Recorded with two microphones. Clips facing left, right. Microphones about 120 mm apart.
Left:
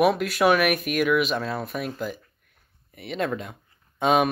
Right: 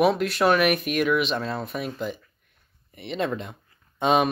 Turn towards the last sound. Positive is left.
turn(degrees=0)  # may be behind; listen again after turning